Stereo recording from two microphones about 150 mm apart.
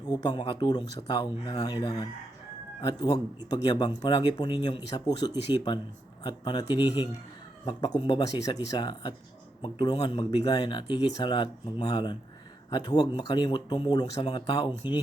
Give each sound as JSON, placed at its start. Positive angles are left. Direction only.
{"t": 0.1, "sound": "speech", "side_deg": 30}
{"t": 14.7, "sound": "speech", "side_deg": -10}